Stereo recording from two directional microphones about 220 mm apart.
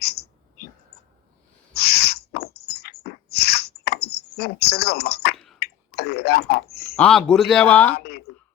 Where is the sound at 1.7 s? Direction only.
45° left (ahead or behind).